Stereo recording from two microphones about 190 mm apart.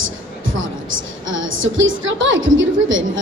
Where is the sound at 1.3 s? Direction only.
90° right.